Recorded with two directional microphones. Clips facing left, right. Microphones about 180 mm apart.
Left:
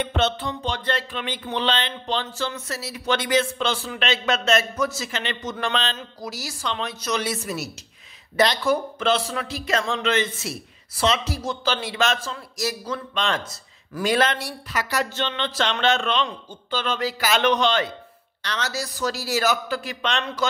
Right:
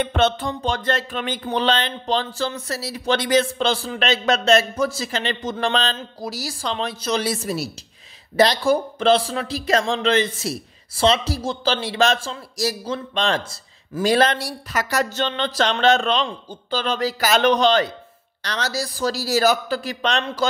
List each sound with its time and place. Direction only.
0.0 s speech: 50° right (ahead or behind)